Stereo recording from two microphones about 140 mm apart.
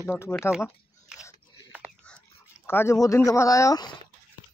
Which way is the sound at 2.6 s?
15° left (ahead or behind).